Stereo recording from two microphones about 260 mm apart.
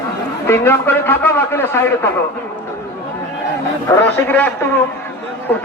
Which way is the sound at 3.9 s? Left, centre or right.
Centre.